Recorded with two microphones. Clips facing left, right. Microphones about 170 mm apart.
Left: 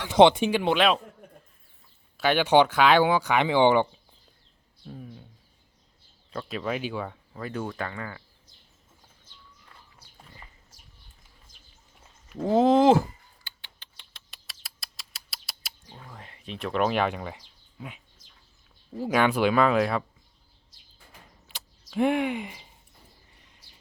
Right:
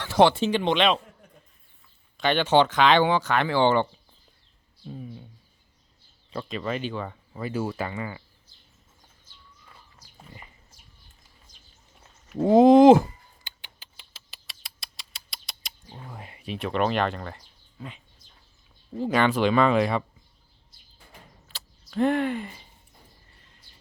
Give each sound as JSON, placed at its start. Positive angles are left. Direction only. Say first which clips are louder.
{"t": 0.0, "sound": "speech", "louder": "left 2 dB", "side_deg": 20}
{"t": 2.1, "sound": "speech", "louder": "left 1 dB", "side_deg": 10}
{"t": 4.9, "sound": "speech", "louder": "right 3 dB", "side_deg": -5}
{"t": 6.3, "sound": "speech", "louder": "even", "side_deg": 0}
{"t": 7.3, "sound": "speech", "louder": "right 4 dB", "side_deg": -5}
{"t": 12.5, "sound": "speech", "louder": "right 5 dB", "side_deg": -15}
{"t": 13.4, "sound": "rodents", "louder": "right 2 dB", "side_deg": -15}
{"t": 15.9, "sound": "a sound", "louder": "right 4 dB", "side_deg": -15}
{"t": 18.9, "sound": "speech", "louder": "right 1 dB", "side_deg": 5}
{"t": 21.9, "sound": "speech", "louder": "right 1 dB", "side_deg": 10}